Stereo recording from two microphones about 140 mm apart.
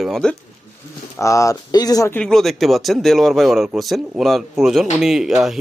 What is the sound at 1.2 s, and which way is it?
Speech, 20° left (ahead or behind).